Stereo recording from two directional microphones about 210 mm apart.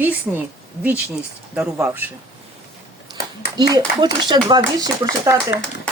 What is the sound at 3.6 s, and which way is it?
Speech, 20° right (ahead or behind).